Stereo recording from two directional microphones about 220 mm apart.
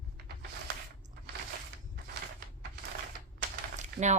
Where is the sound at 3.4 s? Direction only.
35° right (ahead or behind).